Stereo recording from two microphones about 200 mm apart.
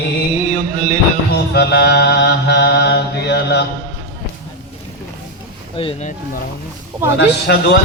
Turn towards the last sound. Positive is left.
turn(degrees=55)  # may be behind; listen again after turning